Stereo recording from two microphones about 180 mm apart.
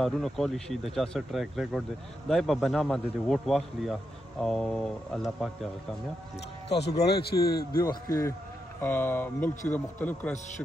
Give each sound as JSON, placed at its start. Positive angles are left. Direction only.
{"t": 0.0, "sound": "speech", "side_deg": 0}
{"t": 7.1, "sound": "a man's voice", "side_deg": 60}
{"t": 7.8, "sound": "speech", "side_deg": 20}